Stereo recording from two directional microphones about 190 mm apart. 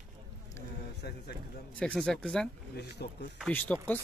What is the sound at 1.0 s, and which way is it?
Speech, 60° left (ahead or behind).